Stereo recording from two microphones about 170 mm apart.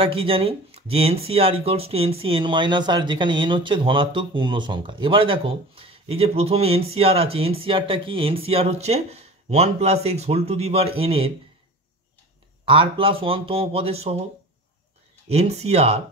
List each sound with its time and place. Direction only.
0.0 s speech: 30° right (ahead or behind)
12.6 s speech: 30° right (ahead or behind)
15.2 s speech: 40° right (ahead or behind)